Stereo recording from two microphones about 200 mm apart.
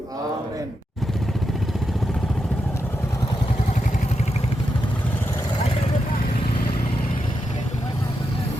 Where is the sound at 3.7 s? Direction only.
35° left (ahead or behind).